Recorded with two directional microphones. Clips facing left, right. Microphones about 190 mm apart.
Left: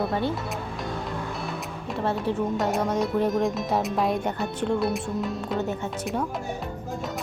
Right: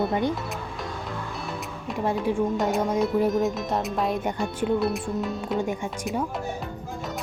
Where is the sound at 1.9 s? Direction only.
15° right (ahead or behind).